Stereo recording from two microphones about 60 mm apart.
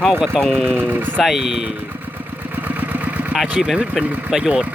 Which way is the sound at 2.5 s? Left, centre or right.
Right.